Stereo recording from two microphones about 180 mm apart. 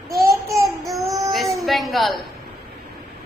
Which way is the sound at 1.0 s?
20° right (ahead or behind).